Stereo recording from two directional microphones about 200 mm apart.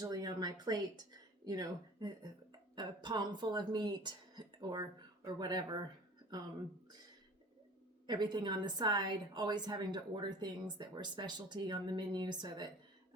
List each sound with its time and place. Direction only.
0.0 s a woman's voice: 20° right (ahead or behind)
8.0 s a woman's voice: 20° right (ahead or behind)